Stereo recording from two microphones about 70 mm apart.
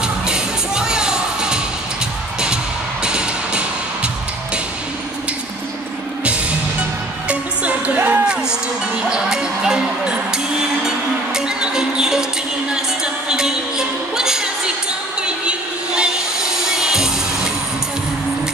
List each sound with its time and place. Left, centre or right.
0.0 s music: centre
7.2 s music: right
8.3 s music: centre